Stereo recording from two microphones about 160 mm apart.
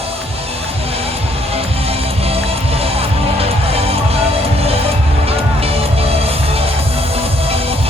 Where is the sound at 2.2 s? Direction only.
40° right (ahead or behind).